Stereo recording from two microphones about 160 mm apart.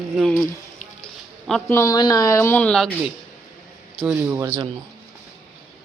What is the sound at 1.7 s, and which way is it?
Speech, 20° left (ahead or behind).